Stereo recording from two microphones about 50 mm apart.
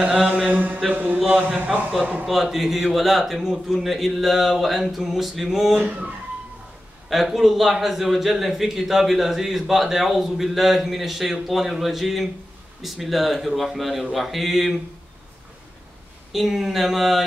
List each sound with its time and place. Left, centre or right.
0.0 s mantra: right
0.9 s a man's voice: right
1.2 s a man's voice: centre
5.8 s speech: right
7.1 s a man's voice: centre
16.3 s a man's voice: centre